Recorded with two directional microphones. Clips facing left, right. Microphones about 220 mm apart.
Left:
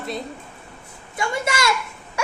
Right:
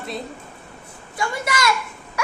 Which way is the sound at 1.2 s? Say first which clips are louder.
Left 1 dB; 25° left (ahead or behind).